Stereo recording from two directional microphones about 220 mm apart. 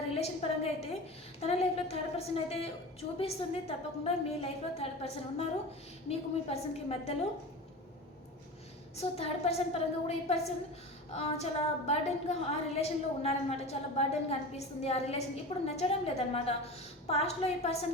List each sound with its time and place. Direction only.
0.1 s a sound: 30° left (ahead or behind)
1.4 s a woman's voice: 30° left (ahead or behind)
9.0 s a woman's voice: 30° left (ahead or behind)